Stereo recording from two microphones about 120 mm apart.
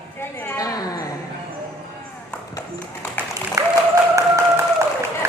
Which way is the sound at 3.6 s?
25° right (ahead or behind).